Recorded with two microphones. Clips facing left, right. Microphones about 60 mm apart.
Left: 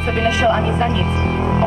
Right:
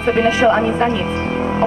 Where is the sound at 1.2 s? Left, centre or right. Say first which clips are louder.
Even; centre.